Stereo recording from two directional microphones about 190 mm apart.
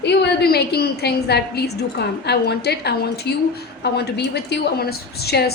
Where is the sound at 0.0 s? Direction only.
60° left (ahead or behind).